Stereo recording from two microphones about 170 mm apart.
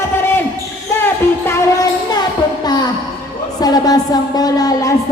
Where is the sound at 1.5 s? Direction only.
20° left (ahead or behind).